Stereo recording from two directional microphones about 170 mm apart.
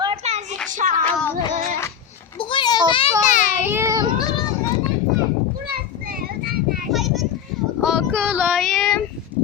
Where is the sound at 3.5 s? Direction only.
15° right (ahead or behind).